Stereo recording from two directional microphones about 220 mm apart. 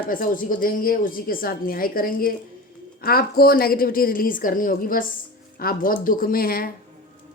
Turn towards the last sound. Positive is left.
turn(degrees=40)  # may be behind; listen again after turning